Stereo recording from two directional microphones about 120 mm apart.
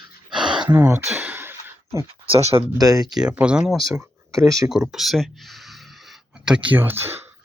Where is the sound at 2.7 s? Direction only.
30° right (ahead or behind).